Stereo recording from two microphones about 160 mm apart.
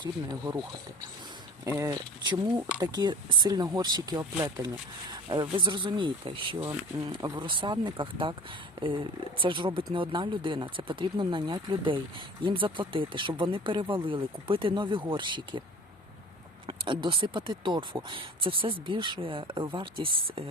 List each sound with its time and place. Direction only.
0.0 s speech: 25° right (ahead or behind)
1.6 s speech: 20° right (ahead or behind)
16.6 s speech: 30° right (ahead or behind)